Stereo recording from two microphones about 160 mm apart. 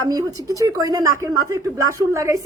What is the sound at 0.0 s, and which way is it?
A woman's voice, 20° right (ahead or behind).